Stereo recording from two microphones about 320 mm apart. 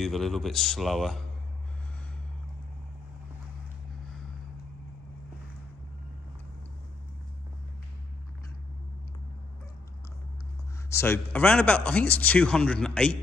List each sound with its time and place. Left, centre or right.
0.0 s speech: centre
10.9 s speech: centre